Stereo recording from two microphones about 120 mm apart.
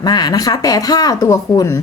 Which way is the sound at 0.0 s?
35° left (ahead or behind).